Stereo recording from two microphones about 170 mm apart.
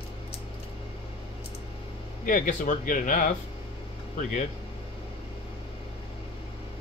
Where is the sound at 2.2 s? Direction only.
50° left (ahead or behind).